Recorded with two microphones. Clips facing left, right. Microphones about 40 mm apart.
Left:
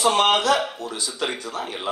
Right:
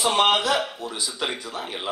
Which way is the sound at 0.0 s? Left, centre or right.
Centre.